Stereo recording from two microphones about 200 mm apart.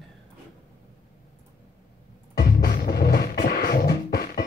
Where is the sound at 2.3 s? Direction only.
50° left (ahead or behind).